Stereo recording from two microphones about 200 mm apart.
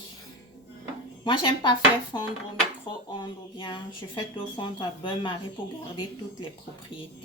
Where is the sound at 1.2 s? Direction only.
25° left (ahead or behind).